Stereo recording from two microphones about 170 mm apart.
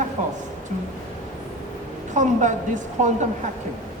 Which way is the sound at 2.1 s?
45° right (ahead or behind).